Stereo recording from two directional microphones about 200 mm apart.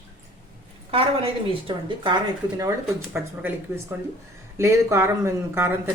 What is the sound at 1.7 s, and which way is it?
Speech, 25° right (ahead or behind).